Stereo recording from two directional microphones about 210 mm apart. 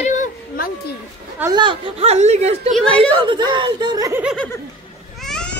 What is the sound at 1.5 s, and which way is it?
Speech, 25° right (ahead or behind).